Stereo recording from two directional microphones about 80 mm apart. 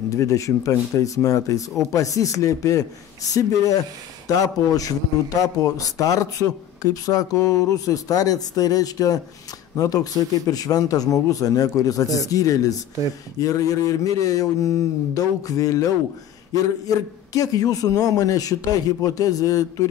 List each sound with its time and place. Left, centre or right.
0.1 s a man's voice: left